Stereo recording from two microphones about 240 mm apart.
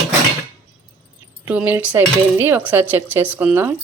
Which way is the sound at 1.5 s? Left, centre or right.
Centre.